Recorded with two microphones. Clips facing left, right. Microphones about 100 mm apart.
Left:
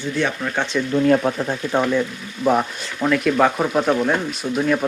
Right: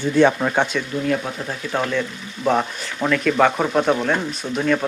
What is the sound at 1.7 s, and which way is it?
Speech, 15° left (ahead or behind).